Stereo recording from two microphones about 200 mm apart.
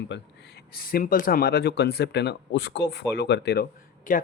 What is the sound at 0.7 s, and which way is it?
Speech, 50° left (ahead or behind).